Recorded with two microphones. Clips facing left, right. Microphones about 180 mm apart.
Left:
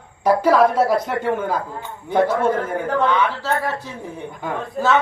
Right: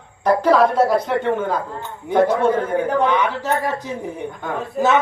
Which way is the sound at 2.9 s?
15° right (ahead or behind).